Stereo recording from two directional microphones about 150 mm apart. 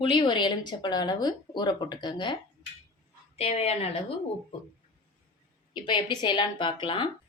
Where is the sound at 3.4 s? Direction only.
40° left (ahead or behind).